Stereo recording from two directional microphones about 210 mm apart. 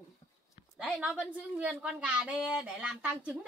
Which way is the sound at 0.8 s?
Centre (ahead or behind).